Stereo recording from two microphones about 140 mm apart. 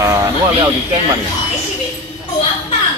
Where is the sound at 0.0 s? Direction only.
20° right (ahead or behind).